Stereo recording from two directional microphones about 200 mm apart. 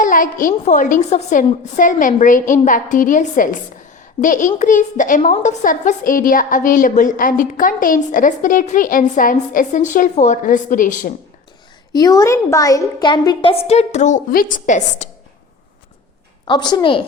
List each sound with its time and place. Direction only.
0.0 s a woman's voice: 40° left (ahead or behind)
11.9 s a woman's voice: 20° left (ahead or behind); by 15.1 s 35° left (ahead or behind)
16.5 s a woman's voice: 20° left (ahead or behind)